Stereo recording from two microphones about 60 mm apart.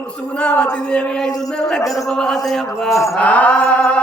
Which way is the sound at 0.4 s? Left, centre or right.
Centre.